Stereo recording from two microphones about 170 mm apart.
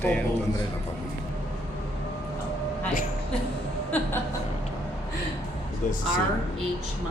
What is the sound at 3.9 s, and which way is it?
Chuckle, 10° left (ahead or behind).